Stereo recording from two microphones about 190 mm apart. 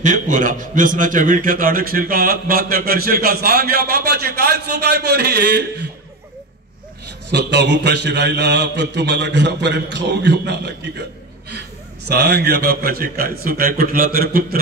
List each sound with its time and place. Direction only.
0.0 s a man's voice: 40° right (ahead or behind); by 5.7 s 60° right (ahead or behind)
7.2 s a man's voice: 65° right (ahead or behind)
12.1 s a man's voice: 60° right (ahead or behind)